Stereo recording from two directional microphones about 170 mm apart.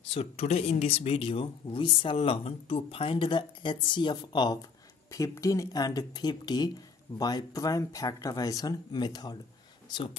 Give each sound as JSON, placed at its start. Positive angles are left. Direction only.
{"t": 0.1, "sound": "speech", "side_deg": 35}